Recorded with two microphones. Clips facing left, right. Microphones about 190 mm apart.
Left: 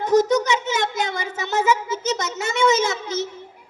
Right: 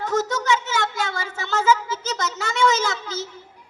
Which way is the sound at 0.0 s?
20° left (ahead or behind).